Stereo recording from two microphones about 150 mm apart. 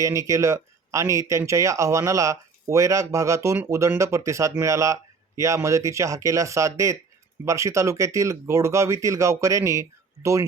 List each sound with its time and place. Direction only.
0.0 s speech: 20° right (ahead or behind)